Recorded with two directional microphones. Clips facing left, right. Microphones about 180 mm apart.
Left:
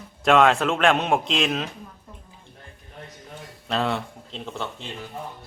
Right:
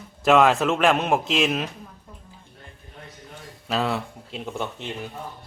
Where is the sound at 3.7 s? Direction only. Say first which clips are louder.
Even; centre (ahead or behind).